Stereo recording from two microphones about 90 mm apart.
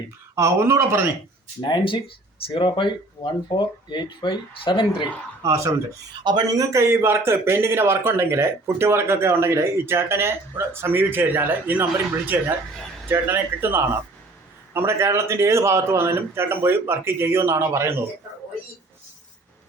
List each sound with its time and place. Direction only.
0.3 s a man's voice: 30° right (ahead or behind)
1.6 s speech: 65° left (ahead or behind)
3.2 s speech: 45° left (ahead or behind)
3.6 s speech: 60° left (ahead or behind)
5.4 s speech: 35° right (ahead or behind)
6.2 s speech: 55° right (ahead or behind)
6.6 s a man's voice: 35° right (ahead or behind)